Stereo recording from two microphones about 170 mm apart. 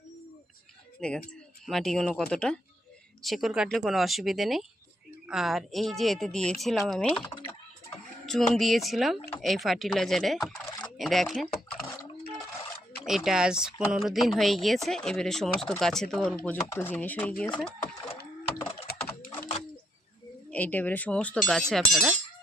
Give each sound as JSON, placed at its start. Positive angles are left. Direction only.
{"t": 1.0, "sound": "speech", "side_deg": 5}
{"t": 8.3, "sound": "speech", "side_deg": 0}
{"t": 13.1, "sound": "speech", "side_deg": 0}
{"t": 18.9, "sound": "typing", "side_deg": 70}
{"t": 20.5, "sound": "speech", "side_deg": 10}